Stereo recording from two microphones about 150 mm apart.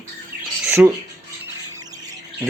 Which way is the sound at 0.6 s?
15° right (ahead or behind).